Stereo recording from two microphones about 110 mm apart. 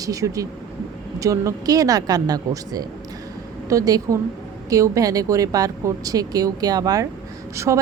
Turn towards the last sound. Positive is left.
turn(degrees=-25)  # may be behind; listen again after turning